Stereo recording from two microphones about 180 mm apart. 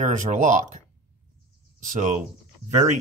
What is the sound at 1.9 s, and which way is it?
Speech, 45° right (ahead or behind).